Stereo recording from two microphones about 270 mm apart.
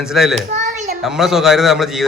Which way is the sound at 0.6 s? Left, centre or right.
Right.